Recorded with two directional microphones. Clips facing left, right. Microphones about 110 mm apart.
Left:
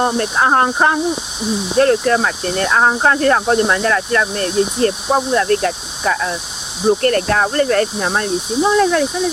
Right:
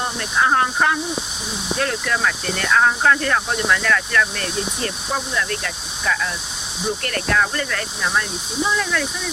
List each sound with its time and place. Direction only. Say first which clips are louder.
0.0 s speech: left 5 dB; 45° left (ahead or behind)